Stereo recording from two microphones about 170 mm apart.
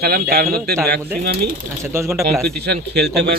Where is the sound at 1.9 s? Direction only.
15° right (ahead or behind).